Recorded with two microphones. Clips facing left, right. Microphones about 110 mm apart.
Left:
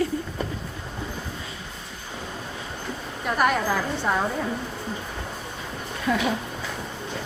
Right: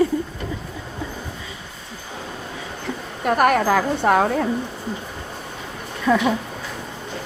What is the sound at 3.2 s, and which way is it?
Speech, 55° right (ahead or behind).